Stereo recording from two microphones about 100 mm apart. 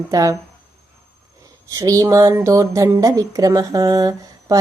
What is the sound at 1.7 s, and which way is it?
Speech, 35° right (ahead or behind).